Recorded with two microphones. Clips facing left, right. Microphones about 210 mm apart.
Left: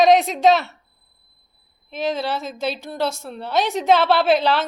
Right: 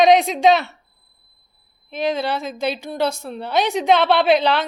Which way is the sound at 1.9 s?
Centre (ahead or behind).